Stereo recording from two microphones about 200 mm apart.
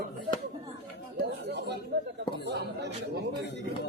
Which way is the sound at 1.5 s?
55° right (ahead or behind).